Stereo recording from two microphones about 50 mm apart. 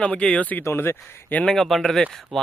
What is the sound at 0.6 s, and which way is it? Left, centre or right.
Speech, left.